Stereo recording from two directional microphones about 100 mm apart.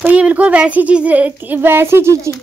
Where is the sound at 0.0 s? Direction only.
15° right (ahead or behind).